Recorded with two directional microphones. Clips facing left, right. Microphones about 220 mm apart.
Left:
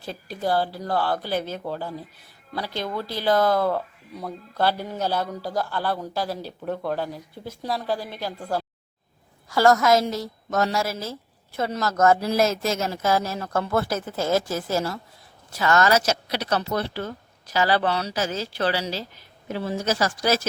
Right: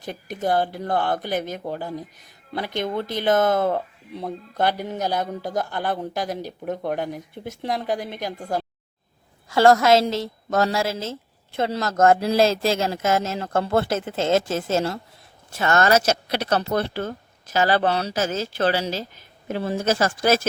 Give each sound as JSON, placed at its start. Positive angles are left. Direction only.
{"t": 0.0, "sound": "speech", "side_deg": -20}
{"t": 9.5, "sound": "speech", "side_deg": -25}
{"t": 16.5, "sound": "speech", "side_deg": -50}